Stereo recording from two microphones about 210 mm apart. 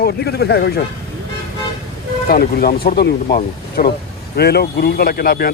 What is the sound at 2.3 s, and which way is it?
Speech, 45° left (ahead or behind).